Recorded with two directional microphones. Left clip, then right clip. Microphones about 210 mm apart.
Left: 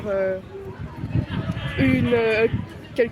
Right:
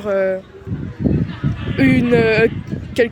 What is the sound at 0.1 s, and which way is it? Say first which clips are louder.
Speech: right 6 dB; 55° right (ahead or behind).